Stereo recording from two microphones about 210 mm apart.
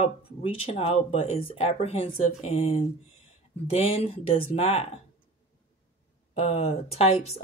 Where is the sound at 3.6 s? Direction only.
30° left (ahead or behind).